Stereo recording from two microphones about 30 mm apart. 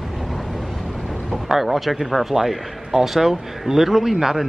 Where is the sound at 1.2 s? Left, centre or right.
Centre.